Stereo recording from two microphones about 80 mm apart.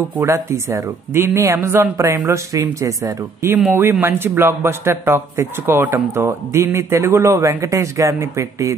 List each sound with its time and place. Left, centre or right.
0.2 s speech: right
4.0 s speech: right